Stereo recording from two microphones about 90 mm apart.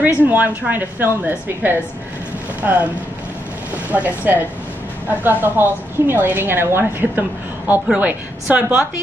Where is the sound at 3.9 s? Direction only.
20° right (ahead or behind).